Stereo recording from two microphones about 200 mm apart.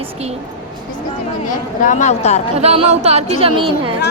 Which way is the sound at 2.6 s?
30° right (ahead or behind).